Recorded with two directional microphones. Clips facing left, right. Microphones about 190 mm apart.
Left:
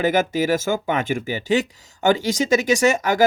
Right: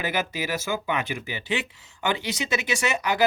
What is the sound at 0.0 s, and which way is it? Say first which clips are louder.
Speech: left 9 dB; 45° left (ahead or behind).